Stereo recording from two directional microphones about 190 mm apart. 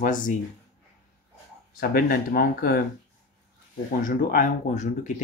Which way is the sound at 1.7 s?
50° left (ahead or behind).